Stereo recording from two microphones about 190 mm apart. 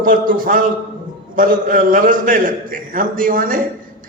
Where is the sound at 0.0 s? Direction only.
45° right (ahead or behind).